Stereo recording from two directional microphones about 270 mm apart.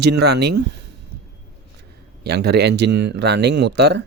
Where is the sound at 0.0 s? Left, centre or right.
Right.